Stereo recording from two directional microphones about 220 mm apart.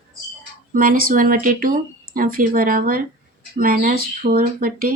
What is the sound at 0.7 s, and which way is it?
Speech, 40° right (ahead or behind).